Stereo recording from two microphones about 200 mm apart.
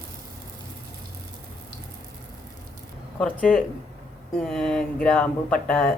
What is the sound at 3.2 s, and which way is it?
Speech, 5° left (ahead or behind).